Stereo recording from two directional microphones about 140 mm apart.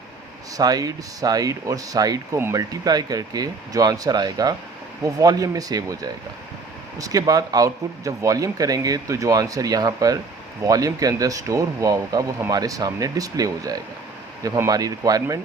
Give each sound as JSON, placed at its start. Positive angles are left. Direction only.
{"t": 0.5, "sound": "speech", "side_deg": -25}